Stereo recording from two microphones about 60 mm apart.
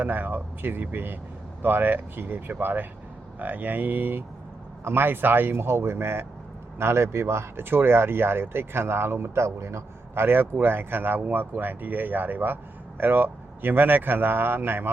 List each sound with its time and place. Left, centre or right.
0.0 s speech: right